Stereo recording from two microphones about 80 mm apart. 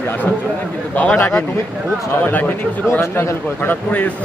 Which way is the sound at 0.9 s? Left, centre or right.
Centre.